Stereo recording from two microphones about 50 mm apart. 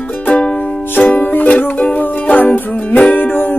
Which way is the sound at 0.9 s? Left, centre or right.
Left.